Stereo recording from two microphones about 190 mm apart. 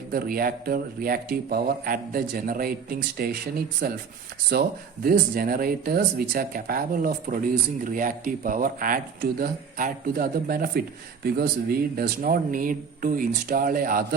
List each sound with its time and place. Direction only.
0.1 s speech: 50° right (ahead or behind)